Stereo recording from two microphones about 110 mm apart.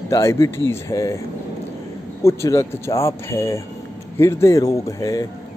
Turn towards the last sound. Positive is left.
turn(degrees=30)  # may be behind; listen again after turning